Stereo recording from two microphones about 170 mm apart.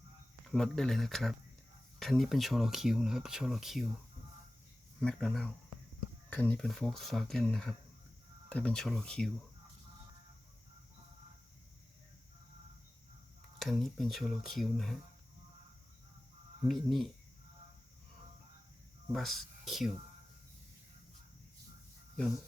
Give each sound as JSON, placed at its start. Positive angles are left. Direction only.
{"t": 0.4, "sound": "speech", "side_deg": 5}
{"t": 4.9, "sound": "speech", "side_deg": 0}
{"t": 13.6, "sound": "speech", "side_deg": 0}
{"t": 16.6, "sound": "speech", "side_deg": 0}
{"t": 19.1, "sound": "speech", "side_deg": 0}